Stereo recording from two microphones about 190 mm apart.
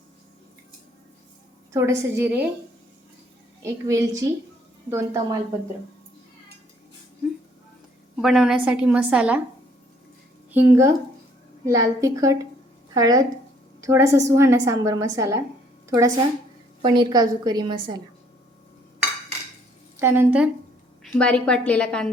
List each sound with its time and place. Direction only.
1.7 s a woman's voice: 15° right (ahead or behind)
3.6 s a woman's voice: 15° right (ahead or behind)
8.1 s a woman's voice: centre (ahead or behind)
10.5 s a woman's voice: 10° right (ahead or behind)
20.0 s a woman's voice: 10° right (ahead or behind)
21.0 s a woman's voice: 5° left (ahead or behind)